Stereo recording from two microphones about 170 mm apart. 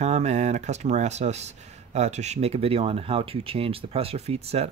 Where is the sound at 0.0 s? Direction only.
40° right (ahead or behind).